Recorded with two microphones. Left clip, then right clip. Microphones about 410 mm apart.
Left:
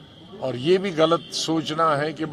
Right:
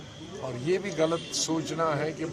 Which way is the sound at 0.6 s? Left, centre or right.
Left.